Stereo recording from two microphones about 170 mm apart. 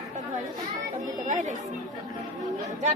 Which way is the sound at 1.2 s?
45° right (ahead or behind).